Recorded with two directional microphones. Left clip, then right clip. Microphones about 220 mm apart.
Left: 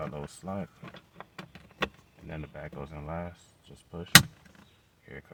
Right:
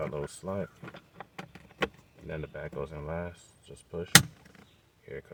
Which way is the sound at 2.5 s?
20° right (ahead or behind).